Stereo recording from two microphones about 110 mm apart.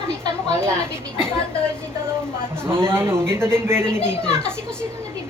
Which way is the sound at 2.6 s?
20° right (ahead or behind).